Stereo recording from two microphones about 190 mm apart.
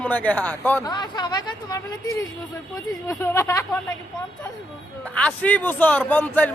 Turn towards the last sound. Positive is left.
turn(degrees=10)  # may be behind; listen again after turning